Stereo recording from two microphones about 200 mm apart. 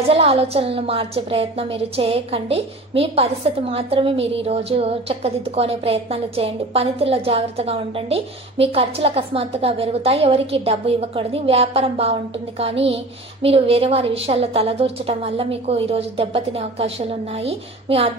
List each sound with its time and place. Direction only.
0.1 s a woman's voice: 30° right (ahead or behind)